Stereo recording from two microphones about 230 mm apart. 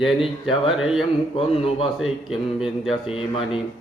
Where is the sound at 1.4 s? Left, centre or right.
Left.